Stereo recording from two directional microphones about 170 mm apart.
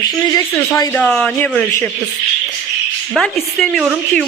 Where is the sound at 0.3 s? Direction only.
20° left (ahead or behind).